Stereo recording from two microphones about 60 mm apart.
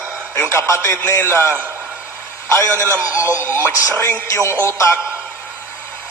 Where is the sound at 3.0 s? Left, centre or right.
Right.